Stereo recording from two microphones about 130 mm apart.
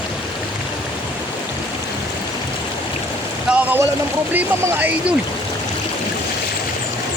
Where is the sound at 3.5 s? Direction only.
10° right (ahead or behind).